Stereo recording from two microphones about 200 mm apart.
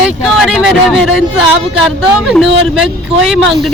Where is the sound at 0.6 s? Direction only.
Centre (ahead or behind).